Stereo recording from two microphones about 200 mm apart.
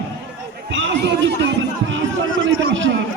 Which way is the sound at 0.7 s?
70° right (ahead or behind).